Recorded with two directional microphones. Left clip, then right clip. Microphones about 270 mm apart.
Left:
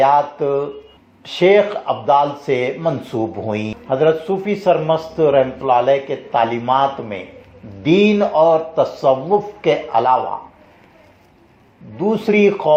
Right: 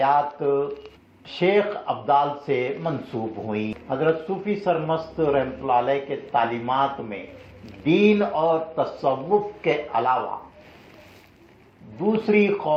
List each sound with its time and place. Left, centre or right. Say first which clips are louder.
0.0 s speech: left 6 dB; left
11.9 s speech: left 5 dB; left